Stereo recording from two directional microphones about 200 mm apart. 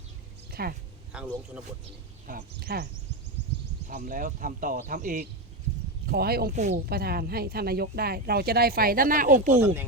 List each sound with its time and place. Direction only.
0.6 s speech: 50° right (ahead or behind)
1.1 s speech: 5° right (ahead or behind)
2.2 s speech: 45° right (ahead or behind)
3.8 s speech: 40° right (ahead or behind)
9.6 s speech: 10° right (ahead or behind)